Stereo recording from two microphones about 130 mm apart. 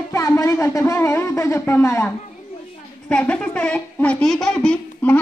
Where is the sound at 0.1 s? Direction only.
25° left (ahead or behind).